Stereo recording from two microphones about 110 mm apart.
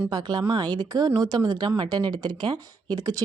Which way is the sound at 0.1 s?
40° right (ahead or behind).